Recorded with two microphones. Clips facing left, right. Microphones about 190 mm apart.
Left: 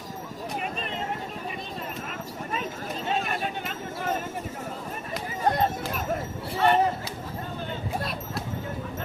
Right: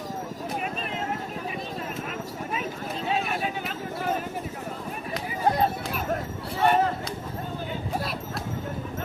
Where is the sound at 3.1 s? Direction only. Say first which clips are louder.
Right 1 dB; centre (ahead or behind).